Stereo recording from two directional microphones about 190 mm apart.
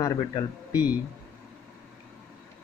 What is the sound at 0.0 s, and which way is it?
Speech, 20° left (ahead or behind).